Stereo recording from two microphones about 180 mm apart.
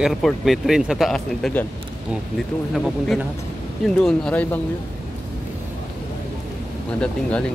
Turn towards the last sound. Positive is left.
turn(degrees=5)  # may be behind; listen again after turning